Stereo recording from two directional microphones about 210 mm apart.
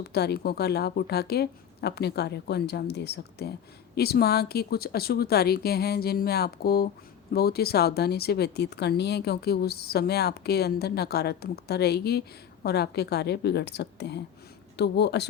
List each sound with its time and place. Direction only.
0.0 s speech: 50° left (ahead or behind)